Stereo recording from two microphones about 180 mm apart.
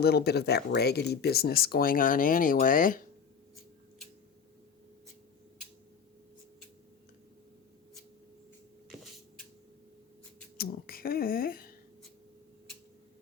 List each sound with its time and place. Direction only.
0.0 s speech: 60° left (ahead or behind)
10.6 s speech: 55° left (ahead or behind)